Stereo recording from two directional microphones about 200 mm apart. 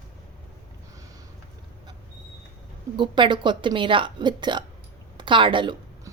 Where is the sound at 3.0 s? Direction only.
25° right (ahead or behind).